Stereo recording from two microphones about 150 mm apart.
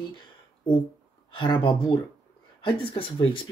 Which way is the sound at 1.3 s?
30° left (ahead or behind).